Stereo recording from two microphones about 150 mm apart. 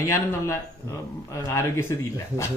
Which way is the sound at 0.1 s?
20° left (ahead or behind).